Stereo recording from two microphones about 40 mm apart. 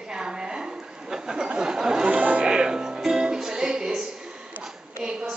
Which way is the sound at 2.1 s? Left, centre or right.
Right.